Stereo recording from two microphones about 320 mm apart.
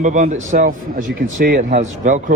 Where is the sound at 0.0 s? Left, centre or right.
Right.